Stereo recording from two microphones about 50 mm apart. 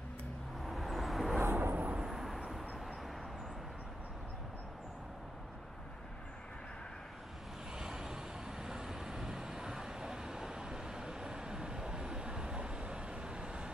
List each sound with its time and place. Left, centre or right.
0.7 s vehicle: centre
1.4 s vehicle: right
2.0 s vehicle: centre
7.7 s vehicle: centre